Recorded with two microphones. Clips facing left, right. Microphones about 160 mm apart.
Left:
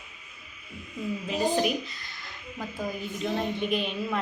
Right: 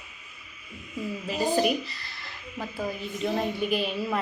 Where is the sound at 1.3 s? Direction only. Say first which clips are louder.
Right 1 dB; 5° right (ahead or behind).